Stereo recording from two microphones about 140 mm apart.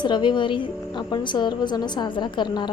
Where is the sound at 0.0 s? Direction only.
35° left (ahead or behind).